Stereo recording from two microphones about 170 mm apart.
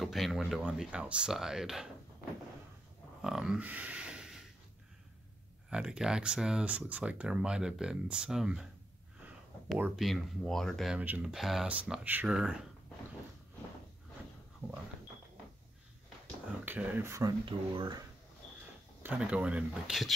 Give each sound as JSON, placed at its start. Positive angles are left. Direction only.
{"t": 0.0, "sound": "speech", "side_deg": 0}
{"t": 3.2, "sound": "a sound", "side_deg": -5}
{"t": 5.7, "sound": "speech", "side_deg": -5}
{"t": 9.8, "sound": "speech", "side_deg": -10}
{"t": 10.0, "sound": "speech", "side_deg": 0}
{"t": 14.6, "sound": "a sound", "side_deg": -15}
{"t": 16.6, "sound": "speech", "side_deg": -10}
{"t": 19.0, "sound": "speech", "side_deg": -10}